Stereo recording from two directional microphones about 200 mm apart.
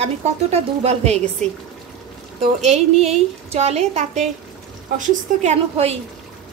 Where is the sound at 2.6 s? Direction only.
30° right (ahead or behind).